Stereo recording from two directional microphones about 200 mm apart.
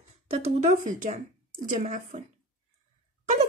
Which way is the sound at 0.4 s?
35° right (ahead or behind).